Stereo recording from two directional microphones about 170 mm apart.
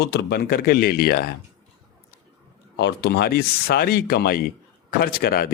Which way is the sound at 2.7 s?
85° left.